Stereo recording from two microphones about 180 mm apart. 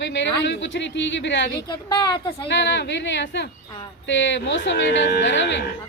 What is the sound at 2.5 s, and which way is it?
Speech, 80° left.